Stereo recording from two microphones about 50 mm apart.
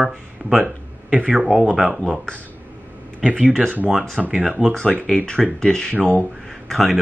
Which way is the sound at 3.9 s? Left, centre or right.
Centre.